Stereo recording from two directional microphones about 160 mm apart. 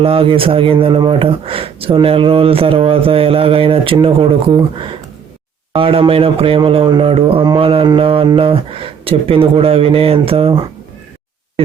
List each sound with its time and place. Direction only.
0.0 s speech: 35° right (ahead or behind)